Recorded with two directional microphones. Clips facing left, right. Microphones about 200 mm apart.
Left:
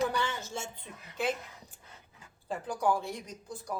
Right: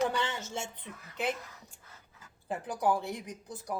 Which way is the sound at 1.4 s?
20° left (ahead or behind).